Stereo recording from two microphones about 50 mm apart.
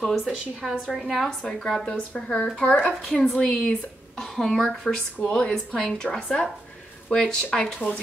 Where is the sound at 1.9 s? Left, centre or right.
Centre.